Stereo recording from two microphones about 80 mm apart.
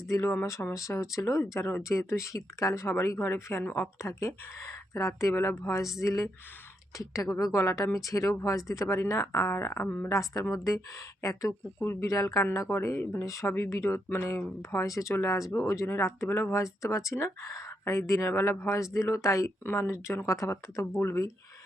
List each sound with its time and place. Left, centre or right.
0.1 s speech: left
10.1 s speech: left
11.8 s speech: left
12.0 s speech: left
19.6 s speech: left